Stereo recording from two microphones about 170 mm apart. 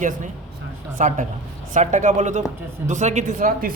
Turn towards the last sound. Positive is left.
turn(degrees=-55)  # may be behind; listen again after turning